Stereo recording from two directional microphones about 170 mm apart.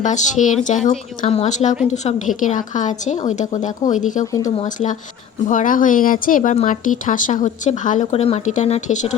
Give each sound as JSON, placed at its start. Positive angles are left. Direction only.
{"t": 0.0, "sound": "speech", "side_deg": 45}
{"t": 4.3, "sound": "speech", "side_deg": 20}
{"t": 4.6, "sound": "speech", "side_deg": 40}